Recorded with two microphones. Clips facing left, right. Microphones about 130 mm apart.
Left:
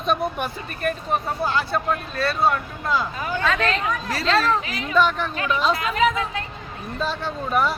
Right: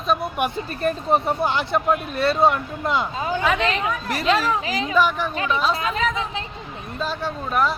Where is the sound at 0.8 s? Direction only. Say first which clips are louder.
Right 4 dB; 25° right (ahead or behind); by 5.3 s 10° right (ahead or behind).